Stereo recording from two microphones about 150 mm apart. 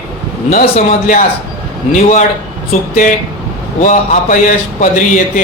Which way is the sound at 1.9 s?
55° left (ahead or behind).